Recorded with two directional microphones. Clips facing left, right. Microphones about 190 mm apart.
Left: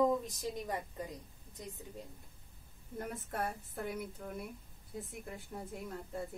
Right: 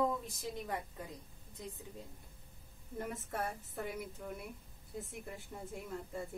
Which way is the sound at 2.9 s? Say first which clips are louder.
Even; 5° right (ahead or behind).